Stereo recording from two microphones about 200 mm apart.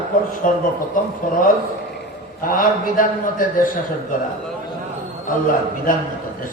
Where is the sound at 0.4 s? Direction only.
45° left (ahead or behind).